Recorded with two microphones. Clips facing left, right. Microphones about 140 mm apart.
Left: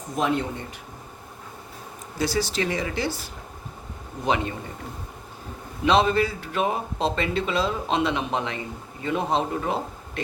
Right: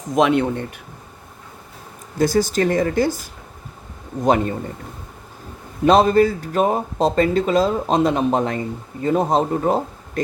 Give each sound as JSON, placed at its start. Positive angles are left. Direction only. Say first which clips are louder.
{"t": 0.2, "sound": "speech", "louder": "right 8 dB", "side_deg": -70}
{"t": 2.1, "sound": "speech", "louder": "right 8 dB", "side_deg": -45}
{"t": 4.2, "sound": "speech", "louder": "right 7 dB", "side_deg": -45}
{"t": 5.8, "sound": "speech", "louder": "right 7 dB", "side_deg": -45}